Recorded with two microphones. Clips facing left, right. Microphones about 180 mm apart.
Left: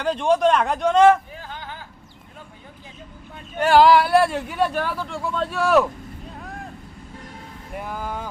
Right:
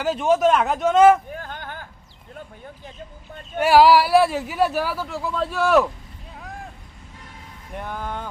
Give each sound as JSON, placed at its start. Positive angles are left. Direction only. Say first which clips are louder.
{"t": 0.0, "sound": "speech", "louder": "even", "side_deg": -5}
{"t": 1.3, "sound": "a sound", "louder": "right 2 dB", "side_deg": -55}
{"t": 3.6, "sound": "speech", "louder": "even", "side_deg": -5}
{"t": 6.4, "sound": "vehicle", "louder": "right 1 dB", "side_deg": 0}
{"t": 7.7, "sound": "speech", "louder": "even", "side_deg": 5}